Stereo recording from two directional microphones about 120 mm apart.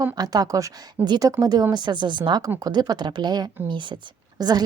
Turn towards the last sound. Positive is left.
turn(degrees=-35)  # may be behind; listen again after turning